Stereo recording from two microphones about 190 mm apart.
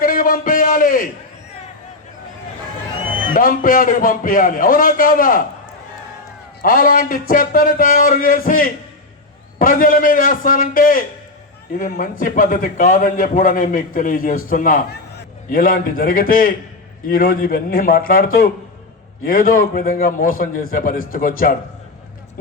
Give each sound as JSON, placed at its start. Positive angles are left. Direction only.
{"t": 0.0, "sound": "a sound", "side_deg": 45}
{"t": 3.3, "sound": "a man's voice", "side_deg": 50}
{"t": 6.6, "sound": "a man's voice", "side_deg": 50}